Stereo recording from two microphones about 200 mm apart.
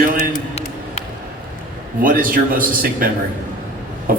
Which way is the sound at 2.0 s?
45° right (ahead or behind).